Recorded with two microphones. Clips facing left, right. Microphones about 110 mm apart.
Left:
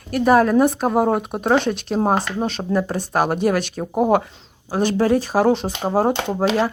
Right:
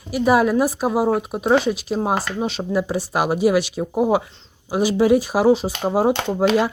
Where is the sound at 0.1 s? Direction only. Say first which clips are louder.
Left 2 dB; 5° right (ahead or behind).